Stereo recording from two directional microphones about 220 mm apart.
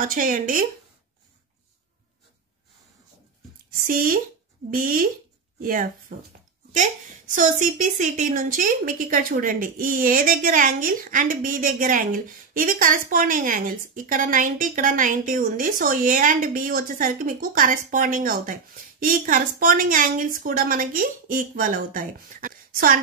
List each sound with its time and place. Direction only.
0.0 s a woman's voice: 35° right (ahead or behind)
3.8 s a woman's voice: 40° right (ahead or behind)
7.3 s a woman's voice: 35° right (ahead or behind)